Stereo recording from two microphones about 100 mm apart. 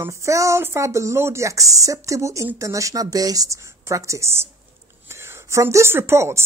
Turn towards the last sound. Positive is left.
turn(degrees=-25)  # may be behind; listen again after turning